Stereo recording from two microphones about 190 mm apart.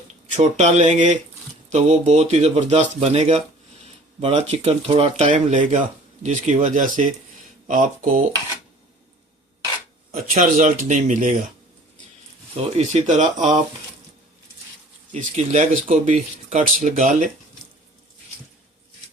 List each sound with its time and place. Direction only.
0.3 s speech: 35° right (ahead or behind)
10.3 s speech: 40° right (ahead or behind)
12.7 s speech: 35° right (ahead or behind)
15.1 s speech: 40° right (ahead or behind)